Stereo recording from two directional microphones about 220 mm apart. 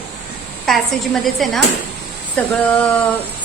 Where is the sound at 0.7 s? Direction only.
Centre (ahead or behind).